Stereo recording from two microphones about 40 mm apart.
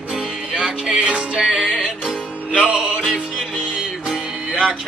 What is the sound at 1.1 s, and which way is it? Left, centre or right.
Music, right.